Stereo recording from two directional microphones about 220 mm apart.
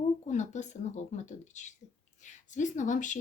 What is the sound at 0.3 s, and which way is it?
Speech, 30° left (ahead or behind).